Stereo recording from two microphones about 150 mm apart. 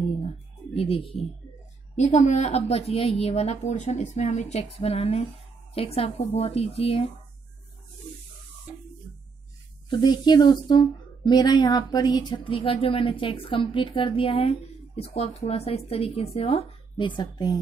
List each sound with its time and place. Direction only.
0.7 s speech: 40° left (ahead or behind)
2.0 s a woman's voice: 50° left (ahead or behind)
9.8 s speech: 30° left (ahead or behind)